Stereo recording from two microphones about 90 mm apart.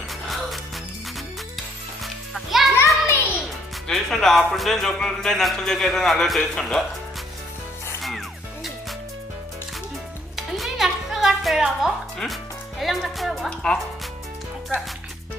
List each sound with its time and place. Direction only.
0.1 s music: centre (ahead or behind)
2.0 s music: centre (ahead or behind)
2.7 s a sound: 25° left (ahead or behind)
3.8 s speech: 5° left (ahead or behind)
10.3 s music: centre (ahead or behind)
12.8 s speech: centre (ahead or behind)